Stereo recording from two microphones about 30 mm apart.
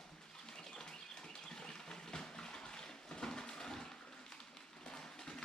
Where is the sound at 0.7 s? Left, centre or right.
Left.